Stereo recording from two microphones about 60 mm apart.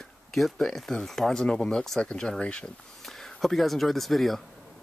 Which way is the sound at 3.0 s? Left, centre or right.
Centre.